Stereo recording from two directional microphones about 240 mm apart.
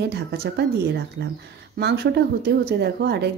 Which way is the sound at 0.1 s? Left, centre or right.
Right.